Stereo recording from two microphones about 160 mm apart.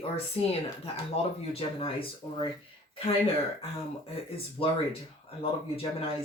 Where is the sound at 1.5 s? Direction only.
35° left (ahead or behind).